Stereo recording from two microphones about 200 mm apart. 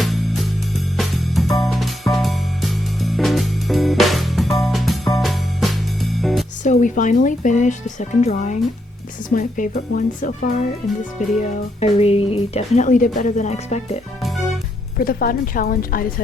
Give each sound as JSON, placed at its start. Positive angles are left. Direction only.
{"t": 0.0, "sound": "music", "side_deg": 0}
{"t": 6.6, "sound": "speech", "side_deg": 40}
{"t": 11.3, "sound": "speech", "side_deg": 30}
{"t": 14.2, "sound": "music", "side_deg": 0}
{"t": 14.9, "sound": "a woman's voice", "side_deg": 50}